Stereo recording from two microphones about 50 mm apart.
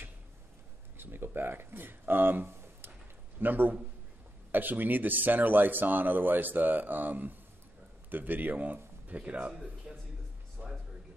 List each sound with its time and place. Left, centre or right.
0.9 s speech: right
3.3 s speech: right
9.5 s speech: centre
10.6 s music: right